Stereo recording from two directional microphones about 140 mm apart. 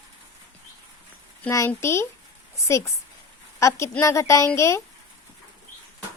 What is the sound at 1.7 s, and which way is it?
Speech, 20° left (ahead or behind).